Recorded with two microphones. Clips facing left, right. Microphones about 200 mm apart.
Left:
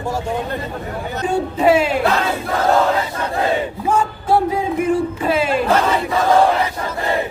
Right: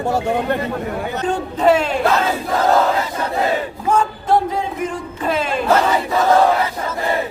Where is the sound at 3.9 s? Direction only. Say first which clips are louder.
Right 1 dB; 10° left (ahead or behind).